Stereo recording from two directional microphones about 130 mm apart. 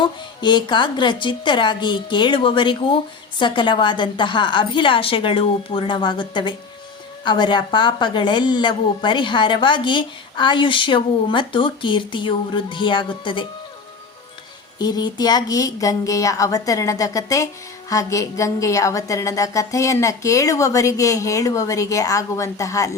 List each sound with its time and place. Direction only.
0.0 s a woman's voice: 35° left (ahead or behind)
14.8 s speech: 30° left (ahead or behind)